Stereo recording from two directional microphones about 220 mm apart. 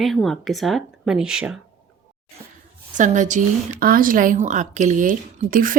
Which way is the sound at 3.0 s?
35° right (ahead or behind).